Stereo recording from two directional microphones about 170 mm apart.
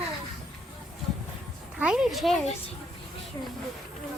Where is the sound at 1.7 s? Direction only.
5° right (ahead or behind).